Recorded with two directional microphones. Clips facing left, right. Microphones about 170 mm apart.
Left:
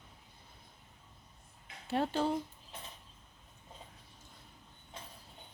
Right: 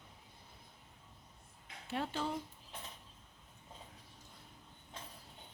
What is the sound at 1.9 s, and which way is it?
Speech, 35° left (ahead or behind).